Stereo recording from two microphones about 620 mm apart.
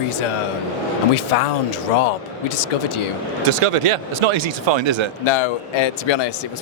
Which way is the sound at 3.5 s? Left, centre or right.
Right.